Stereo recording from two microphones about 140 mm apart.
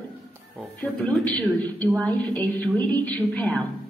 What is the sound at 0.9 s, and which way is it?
Speech, 5° left (ahead or behind).